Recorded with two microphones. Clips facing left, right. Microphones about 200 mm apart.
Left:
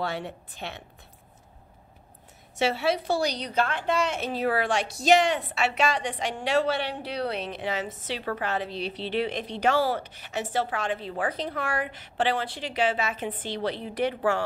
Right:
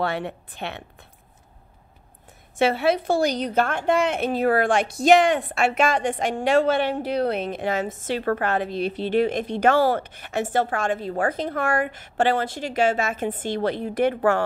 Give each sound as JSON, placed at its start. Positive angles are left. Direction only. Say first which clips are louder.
{"t": 0.0, "sound": "a woman's voice", "louder": "right 5 dB", "side_deg": -60}
{"t": 2.5, "sound": "a woman's voice", "louder": "right 5 dB", "side_deg": -55}